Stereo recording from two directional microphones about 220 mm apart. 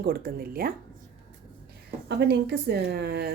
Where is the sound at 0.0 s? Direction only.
45° right (ahead or behind).